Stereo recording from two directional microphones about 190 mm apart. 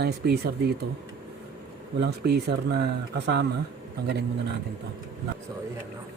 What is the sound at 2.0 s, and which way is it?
Speech, 60° right (ahead or behind).